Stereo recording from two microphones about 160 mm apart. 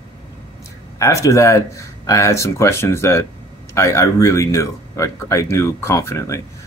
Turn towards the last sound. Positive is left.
turn(degrees=15)  # may be behind; listen again after turning